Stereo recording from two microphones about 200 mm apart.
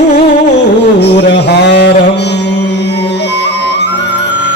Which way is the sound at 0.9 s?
55° left (ahead or behind).